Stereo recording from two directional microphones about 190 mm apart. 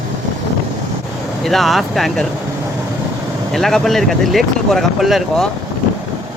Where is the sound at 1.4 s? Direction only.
Centre (ahead or behind).